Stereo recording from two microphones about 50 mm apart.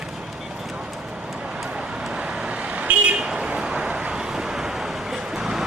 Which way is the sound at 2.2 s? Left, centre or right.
Right.